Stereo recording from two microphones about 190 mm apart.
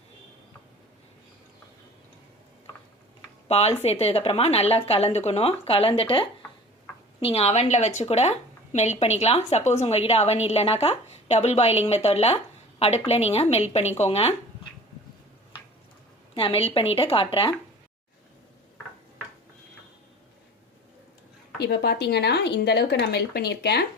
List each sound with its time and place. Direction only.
3.5 s a woman's voice: 35° left (ahead or behind)
16.3 s a woman's voice: 30° left (ahead or behind)
21.6 s speech: 60° left (ahead or behind)